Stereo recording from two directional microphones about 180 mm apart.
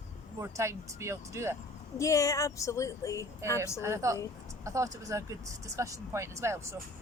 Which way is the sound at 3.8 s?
15° right (ahead or behind).